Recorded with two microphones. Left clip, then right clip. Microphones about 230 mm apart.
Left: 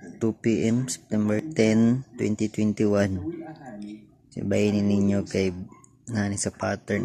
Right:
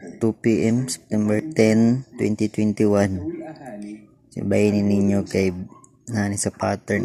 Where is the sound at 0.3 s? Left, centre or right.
Centre.